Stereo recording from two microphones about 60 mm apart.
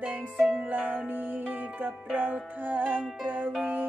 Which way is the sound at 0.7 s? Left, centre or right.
Right.